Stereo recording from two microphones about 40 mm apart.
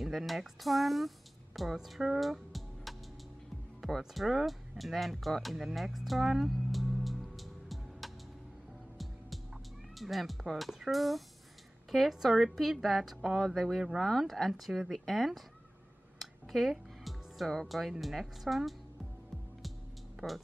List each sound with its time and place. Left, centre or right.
0.0 s a woman's voice: centre
2.5 s music: centre
4.1 s speech: centre
9.9 s a woman's voice: centre
16.2 s music: centre
17.6 s a woman's voice: centre